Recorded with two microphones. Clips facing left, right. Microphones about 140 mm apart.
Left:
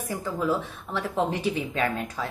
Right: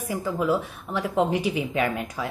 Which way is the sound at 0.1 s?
10° right (ahead or behind).